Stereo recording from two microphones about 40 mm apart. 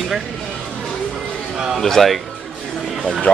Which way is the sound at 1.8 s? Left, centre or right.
Centre.